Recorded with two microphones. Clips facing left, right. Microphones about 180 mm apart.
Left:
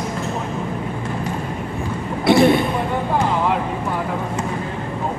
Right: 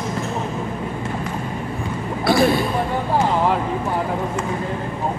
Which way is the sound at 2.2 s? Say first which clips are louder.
Left 3 dB; 20° left (ahead or behind).